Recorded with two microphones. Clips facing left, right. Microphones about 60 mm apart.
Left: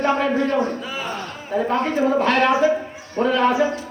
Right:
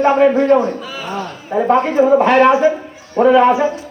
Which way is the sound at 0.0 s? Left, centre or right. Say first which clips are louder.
Right 8 dB; centre.